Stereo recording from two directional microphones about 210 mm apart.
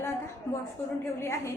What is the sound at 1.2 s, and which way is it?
Speech, 15° left (ahead or behind).